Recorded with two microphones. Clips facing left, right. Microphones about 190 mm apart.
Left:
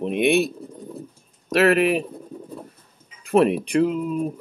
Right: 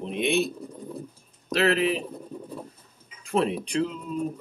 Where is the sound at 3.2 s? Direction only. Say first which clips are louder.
Left 7 dB; 65° left (ahead or behind).